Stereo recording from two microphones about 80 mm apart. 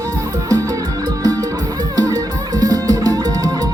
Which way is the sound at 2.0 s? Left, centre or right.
Right.